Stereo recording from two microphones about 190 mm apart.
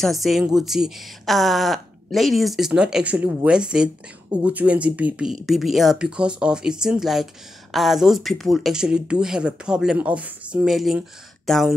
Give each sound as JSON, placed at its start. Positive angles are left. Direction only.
{"t": 0.0, "sound": "speech", "side_deg": 0}